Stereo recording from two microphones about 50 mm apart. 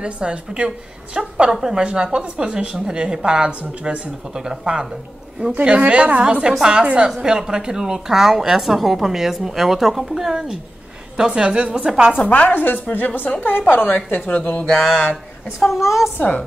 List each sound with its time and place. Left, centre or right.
0.0 s a woman's voice: right
12.3 s a woman's voice: left
13.9 s a woman's voice: left
14.8 s speech: centre